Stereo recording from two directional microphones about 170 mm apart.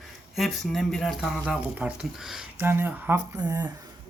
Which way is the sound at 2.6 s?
15° right (ahead or behind).